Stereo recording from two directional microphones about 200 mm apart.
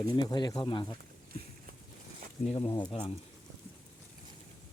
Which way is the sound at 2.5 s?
25° left (ahead or behind).